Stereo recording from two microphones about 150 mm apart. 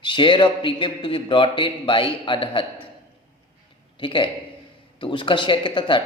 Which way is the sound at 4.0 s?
35° left (ahead or behind).